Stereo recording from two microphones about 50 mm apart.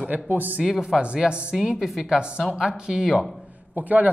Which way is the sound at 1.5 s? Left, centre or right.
Centre.